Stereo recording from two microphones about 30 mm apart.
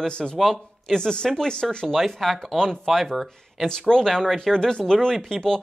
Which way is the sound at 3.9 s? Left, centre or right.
Left.